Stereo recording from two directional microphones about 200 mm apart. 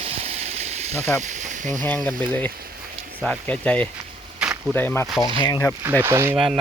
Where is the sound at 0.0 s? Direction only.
35° right (ahead or behind).